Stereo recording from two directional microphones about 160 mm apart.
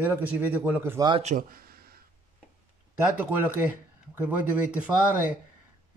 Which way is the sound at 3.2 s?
10° right (ahead or behind).